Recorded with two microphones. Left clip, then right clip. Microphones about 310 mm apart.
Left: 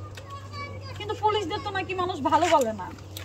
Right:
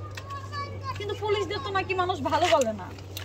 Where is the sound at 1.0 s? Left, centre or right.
Centre.